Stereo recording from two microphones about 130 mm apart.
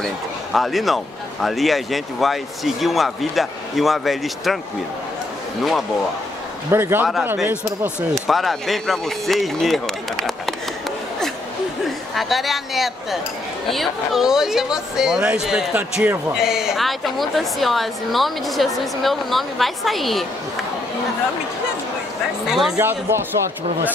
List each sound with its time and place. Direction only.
0.0 s speech: centre (ahead or behind)
5.6 s speech: centre (ahead or behind)
6.7 s speech: 15° right (ahead or behind)
8.1 s speech: centre (ahead or behind)
12.2 s speech: centre (ahead or behind)
22.5 s speech: 5° right (ahead or behind)
22.8 s speech: 20° right (ahead or behind)